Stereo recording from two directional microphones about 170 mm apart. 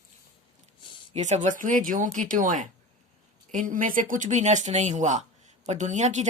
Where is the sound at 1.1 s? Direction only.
45° right (ahead or behind).